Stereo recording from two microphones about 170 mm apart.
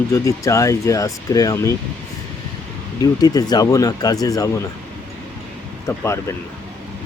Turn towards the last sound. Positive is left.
turn(degrees=15)  # may be behind; listen again after turning